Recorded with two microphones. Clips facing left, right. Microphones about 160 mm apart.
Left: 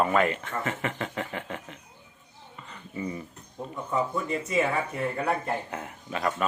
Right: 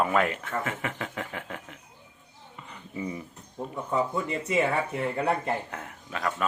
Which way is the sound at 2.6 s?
15° right (ahead or behind).